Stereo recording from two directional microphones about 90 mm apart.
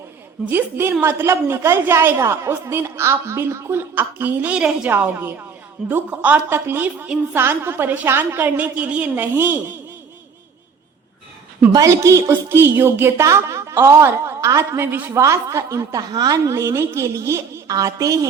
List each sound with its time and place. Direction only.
0.4 s a woman's voice: 25° right (ahead or behind)
4.9 s a woman's voice: 25° right (ahead or behind)
11.7 s a woman's voice: 35° right (ahead or behind)
15.2 s a woman's voice: 35° right (ahead or behind)